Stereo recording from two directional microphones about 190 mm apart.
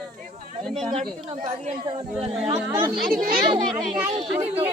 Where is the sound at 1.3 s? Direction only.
35° right (ahead or behind).